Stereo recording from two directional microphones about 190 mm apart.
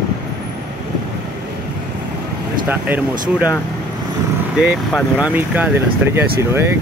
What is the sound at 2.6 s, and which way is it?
Speech, 10° right (ahead or behind).